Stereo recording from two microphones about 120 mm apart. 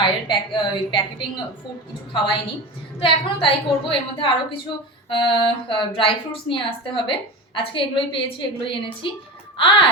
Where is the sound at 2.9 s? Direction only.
45° left (ahead or behind).